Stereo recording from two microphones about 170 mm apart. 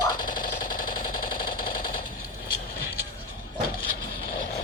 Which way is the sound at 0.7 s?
55° left (ahead or behind).